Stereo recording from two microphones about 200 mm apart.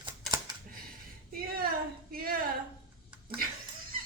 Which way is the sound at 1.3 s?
50° right (ahead or behind).